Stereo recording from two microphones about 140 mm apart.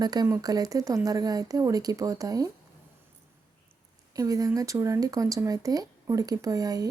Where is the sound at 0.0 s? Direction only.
30° right (ahead or behind).